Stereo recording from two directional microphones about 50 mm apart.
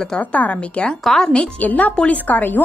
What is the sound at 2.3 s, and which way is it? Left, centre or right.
Speech, left.